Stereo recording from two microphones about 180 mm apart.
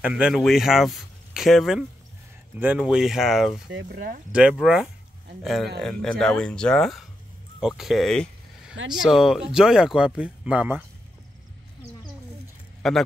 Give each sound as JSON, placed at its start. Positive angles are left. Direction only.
{"t": 0.0, "sound": "speech", "side_deg": -5}
{"t": 3.6, "sound": "speech", "side_deg": -60}
{"t": 4.3, "sound": "speech", "side_deg": -5}
{"t": 12.8, "sound": "speech", "side_deg": 0}